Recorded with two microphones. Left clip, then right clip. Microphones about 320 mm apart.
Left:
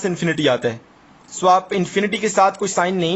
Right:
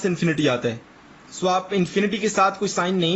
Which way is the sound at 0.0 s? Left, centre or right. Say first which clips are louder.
Left 3 dB; left.